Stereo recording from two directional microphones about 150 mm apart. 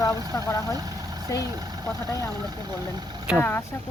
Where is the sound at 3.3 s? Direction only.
15° left (ahead or behind).